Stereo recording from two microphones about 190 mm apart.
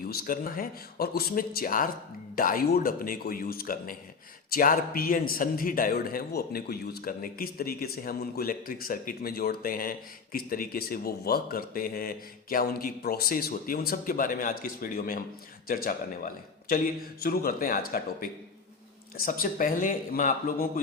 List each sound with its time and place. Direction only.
0.1 s a man's voice: 50° left (ahead or behind)